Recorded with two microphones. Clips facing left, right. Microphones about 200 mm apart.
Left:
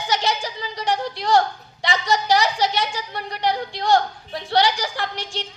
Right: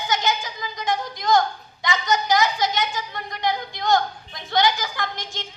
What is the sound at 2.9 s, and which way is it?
A woman's voice, 30° left (ahead or behind).